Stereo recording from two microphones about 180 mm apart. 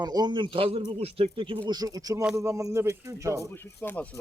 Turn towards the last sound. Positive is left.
turn(degrees=10)  # may be behind; listen again after turning